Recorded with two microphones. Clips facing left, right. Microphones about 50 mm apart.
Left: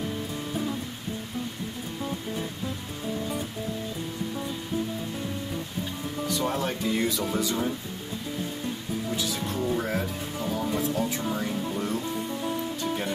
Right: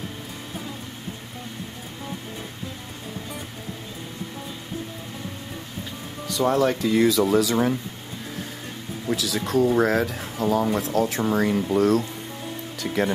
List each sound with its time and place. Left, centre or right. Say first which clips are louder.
6.3 s speech: right 9 dB; right
9.1 s speech: right 10 dB; right